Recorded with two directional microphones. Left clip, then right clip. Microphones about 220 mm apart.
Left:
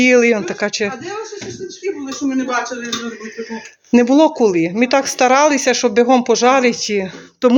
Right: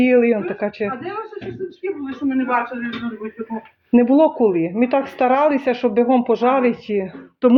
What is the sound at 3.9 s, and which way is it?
Speech, 15° left (ahead or behind).